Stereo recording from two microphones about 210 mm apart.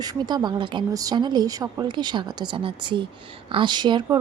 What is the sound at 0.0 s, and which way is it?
Speech, 20° right (ahead or behind).